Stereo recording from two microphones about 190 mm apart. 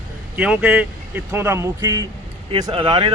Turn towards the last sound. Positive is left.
turn(degrees=-25)  # may be behind; listen again after turning